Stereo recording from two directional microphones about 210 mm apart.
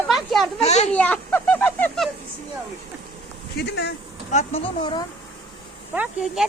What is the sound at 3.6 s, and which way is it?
Speech, 50° left (ahead or behind).